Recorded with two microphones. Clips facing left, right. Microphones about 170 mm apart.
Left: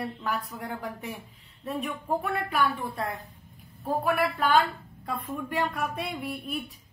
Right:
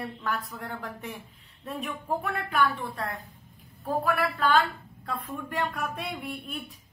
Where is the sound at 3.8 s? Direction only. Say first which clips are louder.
Left 1 dB; 15° left (ahead or behind).